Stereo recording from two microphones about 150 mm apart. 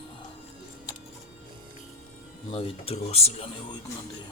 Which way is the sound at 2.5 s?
40° left (ahead or behind).